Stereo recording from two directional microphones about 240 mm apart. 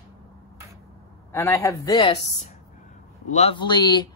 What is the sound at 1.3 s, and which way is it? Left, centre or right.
Speech, centre.